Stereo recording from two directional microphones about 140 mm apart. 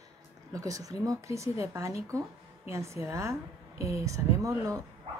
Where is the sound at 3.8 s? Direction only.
45° left (ahead or behind).